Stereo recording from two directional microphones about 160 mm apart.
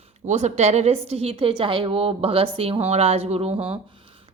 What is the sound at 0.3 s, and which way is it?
A woman's voice, 45° right (ahead or behind).